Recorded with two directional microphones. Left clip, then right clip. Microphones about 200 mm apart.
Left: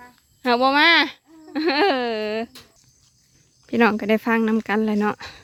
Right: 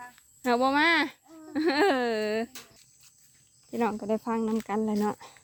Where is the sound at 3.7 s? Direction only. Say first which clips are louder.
Left 10 dB; 25° left (ahead or behind).